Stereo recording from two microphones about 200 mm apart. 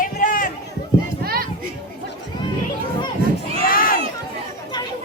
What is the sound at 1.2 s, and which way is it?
Children playing, 50° right (ahead or behind).